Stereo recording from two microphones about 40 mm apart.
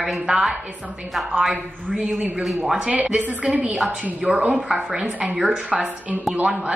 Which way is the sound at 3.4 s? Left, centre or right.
Right.